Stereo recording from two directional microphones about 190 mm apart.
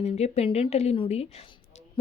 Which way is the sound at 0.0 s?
35° left (ahead or behind).